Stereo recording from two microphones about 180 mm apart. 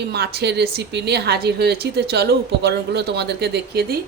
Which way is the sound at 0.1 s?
65° right (ahead or behind).